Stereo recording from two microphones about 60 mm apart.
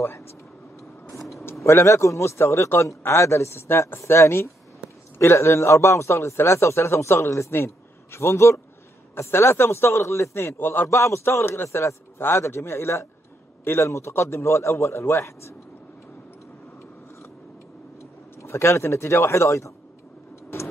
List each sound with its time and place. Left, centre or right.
1.6 s a man's voice: left
10.9 s a man's voice: left
18.4 s a man's voice: left